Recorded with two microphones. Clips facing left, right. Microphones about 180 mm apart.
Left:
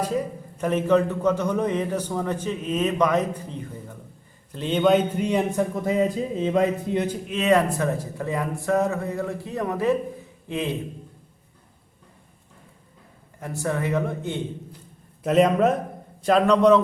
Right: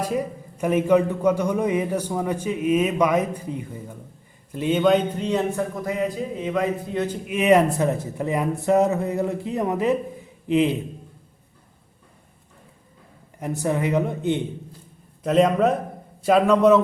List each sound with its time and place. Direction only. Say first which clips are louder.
0.6 s a man's voice: right 2 dB; 10° right (ahead or behind)
4.8 s speech: left 1 dB; centre (ahead or behind); by 7.2 s 20° left (ahead or behind)
7.3 s speech: right 4 dB; 15° right (ahead or behind)
13.4 s a man's voice: right 3 dB; 20° right (ahead or behind)
15.2 s a man's voice: even; centre (ahead or behind)